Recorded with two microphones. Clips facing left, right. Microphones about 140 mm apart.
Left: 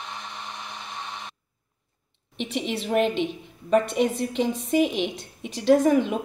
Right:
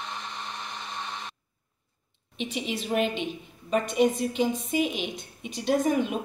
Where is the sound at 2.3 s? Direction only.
70° left (ahead or behind).